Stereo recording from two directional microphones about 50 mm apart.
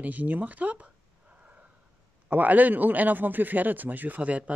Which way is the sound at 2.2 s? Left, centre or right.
Right.